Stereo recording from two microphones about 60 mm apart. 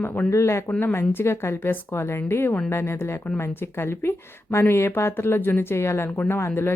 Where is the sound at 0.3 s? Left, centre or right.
Left.